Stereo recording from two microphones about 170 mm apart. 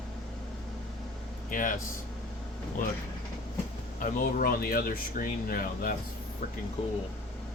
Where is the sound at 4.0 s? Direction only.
60° left (ahead or behind).